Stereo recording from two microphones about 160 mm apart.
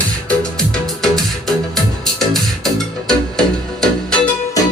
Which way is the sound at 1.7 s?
Centre (ahead or behind).